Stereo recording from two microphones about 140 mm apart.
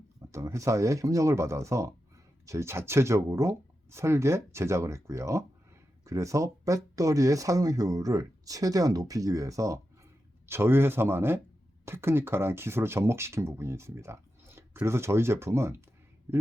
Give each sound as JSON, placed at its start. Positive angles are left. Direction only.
{"t": 0.3, "sound": "speech", "side_deg": -20}